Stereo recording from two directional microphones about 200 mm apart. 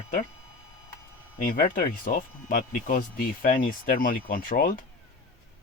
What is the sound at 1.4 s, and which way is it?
Speech, 45° left (ahead or behind).